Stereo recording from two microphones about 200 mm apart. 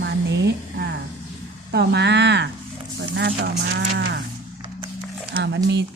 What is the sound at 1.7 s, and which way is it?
Speech, 55° right (ahead or behind).